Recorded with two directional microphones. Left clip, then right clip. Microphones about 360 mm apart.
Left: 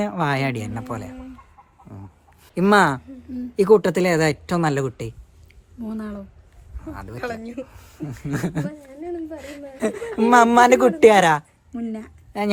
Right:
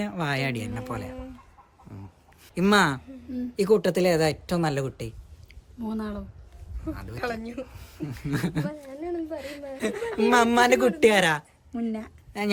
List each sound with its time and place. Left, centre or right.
0.0 s speech: centre
2.4 s speech: centre
5.8 s a woman's voice: centre
6.9 s a woman's voice: centre
11.7 s speech: centre
12.3 s a woman's voice: centre